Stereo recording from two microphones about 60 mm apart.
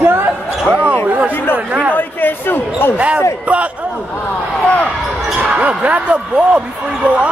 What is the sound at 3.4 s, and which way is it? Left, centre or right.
Speech, right.